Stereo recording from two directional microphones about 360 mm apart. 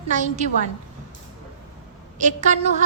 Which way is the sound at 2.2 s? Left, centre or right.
Centre.